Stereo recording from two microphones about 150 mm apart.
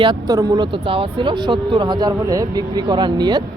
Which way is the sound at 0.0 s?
25° right (ahead or behind).